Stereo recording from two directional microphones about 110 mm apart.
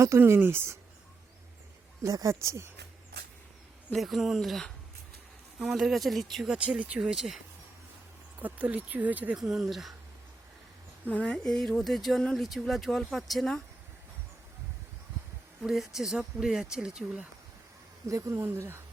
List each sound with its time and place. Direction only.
0.0 s speech: 25° right (ahead or behind)
2.0 s speech: 30° right (ahead or behind)
3.9 s speech: centre (ahead or behind)
8.4 s speech: 15° right (ahead or behind)
9.4 s speech: centre (ahead or behind)
11.1 s speech: 10° left (ahead or behind)
15.6 s speech: 5° right (ahead or behind)
18.1 s speech: 30° right (ahead or behind)